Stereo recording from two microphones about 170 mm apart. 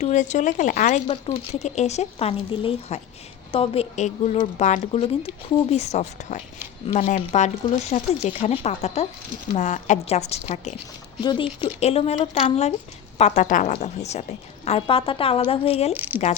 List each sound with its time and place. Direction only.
0.0 s speech: 45° left (ahead or behind)
1.0 s a woman's voice: 35° left (ahead or behind)
6.8 s a woman's voice: 35° left (ahead or behind)
7.1 s a woman's voice: 45° left (ahead or behind)
11.2 s a woman's voice: 30° left (ahead or behind)
16.0 s speech: 10° right (ahead or behind)